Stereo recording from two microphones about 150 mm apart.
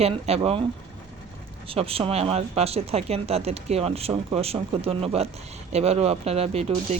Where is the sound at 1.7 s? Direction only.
40° right (ahead or behind).